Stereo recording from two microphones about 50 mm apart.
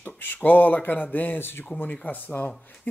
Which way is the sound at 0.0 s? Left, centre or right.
Left.